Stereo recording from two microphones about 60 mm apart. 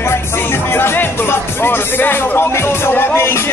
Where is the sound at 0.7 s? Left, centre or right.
Left.